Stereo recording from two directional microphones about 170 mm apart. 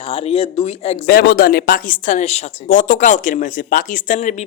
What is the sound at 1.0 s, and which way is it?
Speech, 60° left (ahead or behind).